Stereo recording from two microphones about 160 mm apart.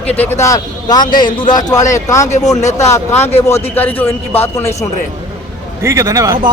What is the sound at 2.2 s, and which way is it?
Speech, 50° left (ahead or behind).